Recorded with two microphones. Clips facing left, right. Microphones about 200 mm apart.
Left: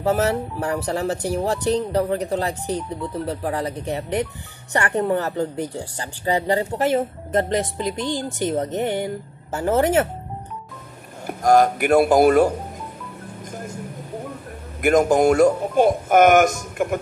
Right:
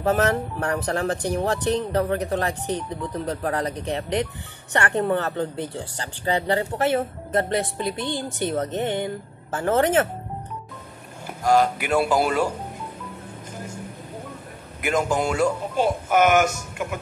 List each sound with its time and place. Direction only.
0.0 s speech: 10° left (ahead or behind)
11.2 s speech: 50° left (ahead or behind)
14.8 s speech: 50° left (ahead or behind)